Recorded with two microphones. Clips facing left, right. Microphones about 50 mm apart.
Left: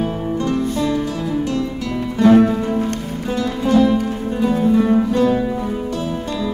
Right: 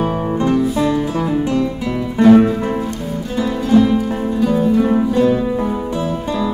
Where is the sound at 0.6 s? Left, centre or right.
Centre.